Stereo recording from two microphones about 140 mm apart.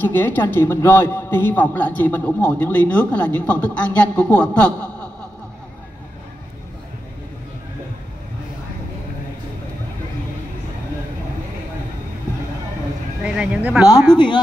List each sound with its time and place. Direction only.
0.0 s a man's voice: 15° left (ahead or behind)
13.2 s speech: 10° right (ahead or behind)
14.1 s speech: 35° left (ahead or behind)